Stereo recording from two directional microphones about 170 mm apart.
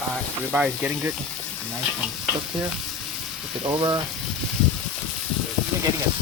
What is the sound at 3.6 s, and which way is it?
Speech, 20° right (ahead or behind).